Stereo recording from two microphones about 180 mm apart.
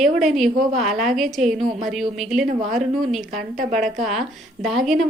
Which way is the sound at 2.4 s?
45° right (ahead or behind).